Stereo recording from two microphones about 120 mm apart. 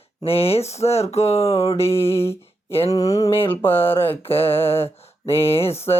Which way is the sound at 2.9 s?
30° left (ahead or behind).